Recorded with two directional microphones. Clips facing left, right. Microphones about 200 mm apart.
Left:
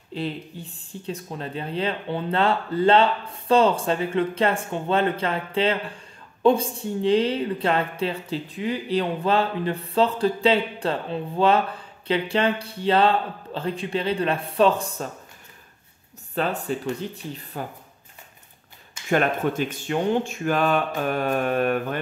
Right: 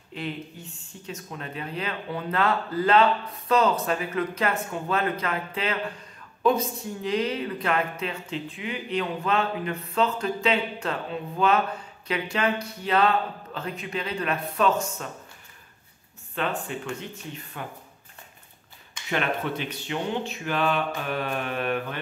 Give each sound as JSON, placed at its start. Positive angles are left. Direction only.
{"t": 0.1, "sound": "speech", "side_deg": 30}
{"t": 16.3, "sound": "speech", "side_deg": 35}
{"t": 19.0, "sound": "speech", "side_deg": 45}